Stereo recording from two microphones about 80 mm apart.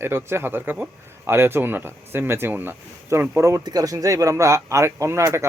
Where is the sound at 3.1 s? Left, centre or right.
Right.